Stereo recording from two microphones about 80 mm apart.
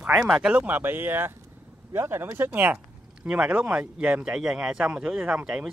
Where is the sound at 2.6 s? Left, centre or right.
Centre.